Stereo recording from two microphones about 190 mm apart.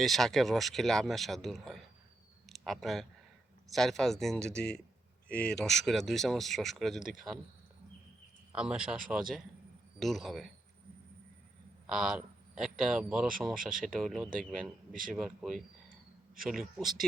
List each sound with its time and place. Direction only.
0.0 s speech: centre (ahead or behind)
8.5 s speech: 5° right (ahead or behind)
11.9 s speech: centre (ahead or behind)